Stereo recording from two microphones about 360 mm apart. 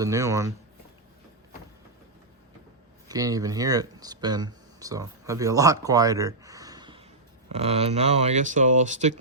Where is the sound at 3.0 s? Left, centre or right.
Centre.